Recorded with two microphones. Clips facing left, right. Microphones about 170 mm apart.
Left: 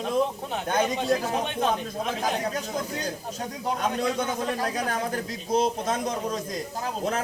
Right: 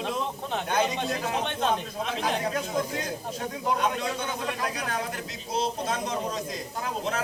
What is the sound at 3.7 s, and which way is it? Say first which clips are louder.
A man's voice: left 1 dB; 40° left (ahead or behind).